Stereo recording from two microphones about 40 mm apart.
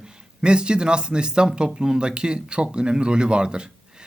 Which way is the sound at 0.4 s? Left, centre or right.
Right.